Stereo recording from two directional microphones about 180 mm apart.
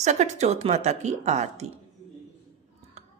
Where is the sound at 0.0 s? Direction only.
40° right (ahead or behind).